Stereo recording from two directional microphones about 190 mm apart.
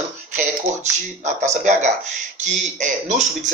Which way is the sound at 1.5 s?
40° right (ahead or behind).